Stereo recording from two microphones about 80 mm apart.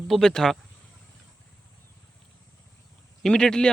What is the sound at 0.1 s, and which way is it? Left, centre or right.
Speech, centre.